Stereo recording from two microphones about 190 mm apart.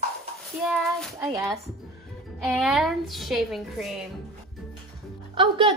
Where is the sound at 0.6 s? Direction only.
Centre (ahead or behind).